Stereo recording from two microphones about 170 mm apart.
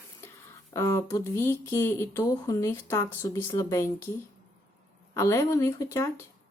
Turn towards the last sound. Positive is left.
turn(degrees=15)  # may be behind; listen again after turning